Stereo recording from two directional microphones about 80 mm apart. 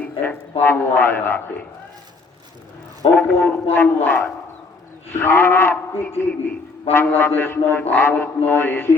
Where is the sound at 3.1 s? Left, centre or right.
Left.